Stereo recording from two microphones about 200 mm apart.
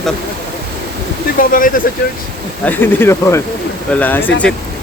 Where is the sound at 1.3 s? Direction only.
45° left (ahead or behind).